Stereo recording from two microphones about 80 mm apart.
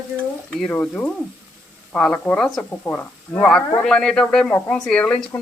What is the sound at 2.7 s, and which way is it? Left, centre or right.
Speech, centre.